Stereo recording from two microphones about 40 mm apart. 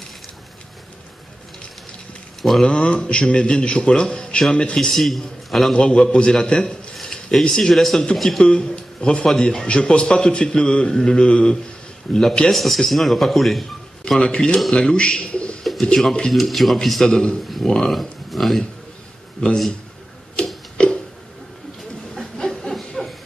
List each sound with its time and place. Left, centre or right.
2.6 s speech: left
4.9 s a man's voice: centre
5.7 s a man's voice: left
7.7 s a man's voice: centre
8.4 s a man's voice: left
12.1 s a man's voice: centre
14.3 s speech: centre
15.6 s a sound: centre
15.9 s a man's voice: centre
17.0 s a man's voice: left
17.9 s speech: centre
19.4 s speech: left
20.4 s a sound: left
22.4 s a sound: centre